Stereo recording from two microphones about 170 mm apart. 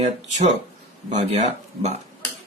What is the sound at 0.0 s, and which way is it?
A man's voice, 40° right (ahead or behind).